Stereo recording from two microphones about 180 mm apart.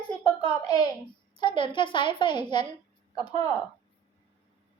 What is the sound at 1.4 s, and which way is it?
A woman's voice, 25° left (ahead or behind).